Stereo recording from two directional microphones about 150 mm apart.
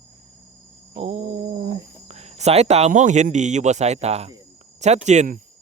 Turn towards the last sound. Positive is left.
turn(degrees=-50)  # may be behind; listen again after turning